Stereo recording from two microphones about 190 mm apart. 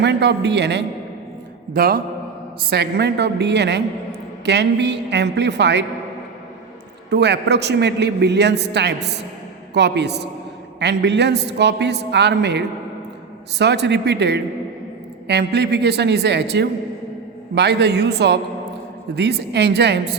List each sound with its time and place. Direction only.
0.0 s a man's voice: 65° right (ahead or behind)
1.7 s a man's voice: 50° right (ahead or behind)
7.1 s a man's voice: 60° right (ahead or behind)